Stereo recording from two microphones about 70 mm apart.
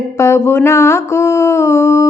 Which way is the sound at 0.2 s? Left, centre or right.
Left.